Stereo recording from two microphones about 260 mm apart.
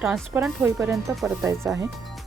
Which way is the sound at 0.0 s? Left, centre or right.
Centre.